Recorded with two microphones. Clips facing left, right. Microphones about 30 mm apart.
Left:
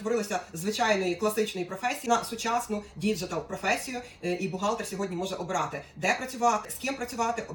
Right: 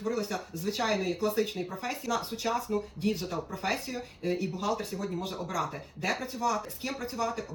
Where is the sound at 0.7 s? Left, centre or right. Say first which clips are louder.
Left 4 dB; left.